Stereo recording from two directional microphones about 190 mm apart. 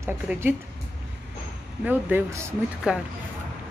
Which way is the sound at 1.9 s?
10° right (ahead or behind).